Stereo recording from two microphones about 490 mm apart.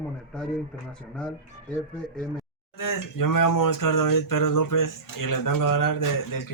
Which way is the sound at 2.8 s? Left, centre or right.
Left.